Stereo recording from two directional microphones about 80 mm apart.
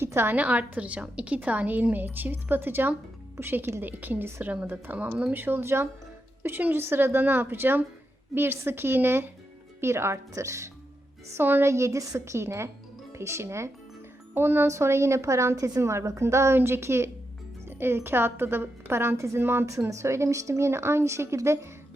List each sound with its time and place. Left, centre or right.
0.0 s a sound: right
0.3 s a woman's voice: centre; by 10.7 s right
11.3 s a woman's voice: right
15.5 s a woman's voice: right
15.8 s a woman's voice: right